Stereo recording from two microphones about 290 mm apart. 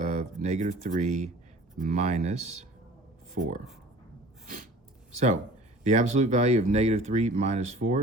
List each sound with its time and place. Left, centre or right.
0.0 s a sound: right
0.4 s speech: right
4.4 s sneeze: right
5.8 s speech: right